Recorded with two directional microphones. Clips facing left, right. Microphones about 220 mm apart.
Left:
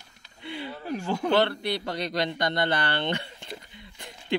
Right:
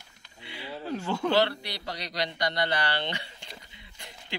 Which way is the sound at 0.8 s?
15° left (ahead or behind).